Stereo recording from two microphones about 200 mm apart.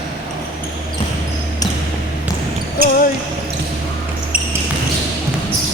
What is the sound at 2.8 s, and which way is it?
Basketball bounce, 45° right (ahead or behind).